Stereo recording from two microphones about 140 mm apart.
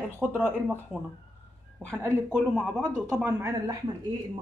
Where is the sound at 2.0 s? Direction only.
5° right (ahead or behind).